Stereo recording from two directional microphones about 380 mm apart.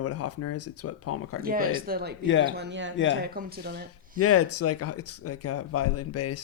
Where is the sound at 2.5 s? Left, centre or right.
Right.